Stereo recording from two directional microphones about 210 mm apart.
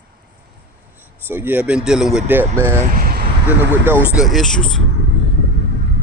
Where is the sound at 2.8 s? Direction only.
40° right (ahead or behind).